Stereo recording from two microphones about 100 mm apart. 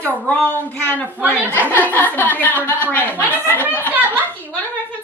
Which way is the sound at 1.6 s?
15° left (ahead or behind).